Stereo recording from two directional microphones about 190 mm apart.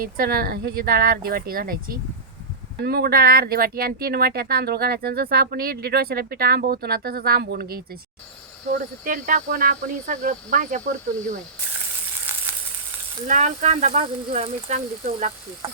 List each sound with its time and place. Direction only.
0.2 s speech: 50° right (ahead or behind)
12.5 s sizzle: 10° right (ahead or behind)
13.2 s speech: 40° right (ahead or behind)